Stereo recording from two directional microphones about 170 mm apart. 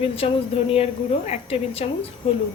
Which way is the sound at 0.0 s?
35° left (ahead or behind).